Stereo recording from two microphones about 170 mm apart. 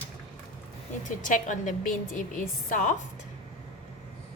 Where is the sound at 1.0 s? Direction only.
45° left (ahead or behind).